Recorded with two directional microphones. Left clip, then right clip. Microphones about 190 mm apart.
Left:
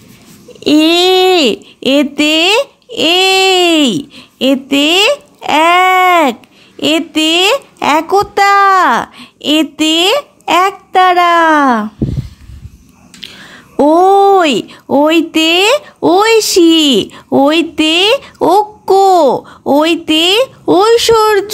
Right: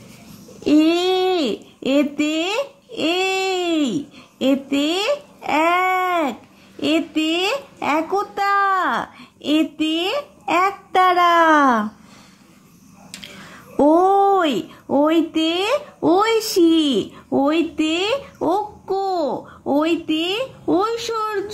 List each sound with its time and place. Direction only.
0.7 s a child's voice: 30° left (ahead or behind)
10.9 s speech: 20° left (ahead or behind)
13.2 s speech: 25° left (ahead or behind)
18.9 s a child's voice: 50° left (ahead or behind)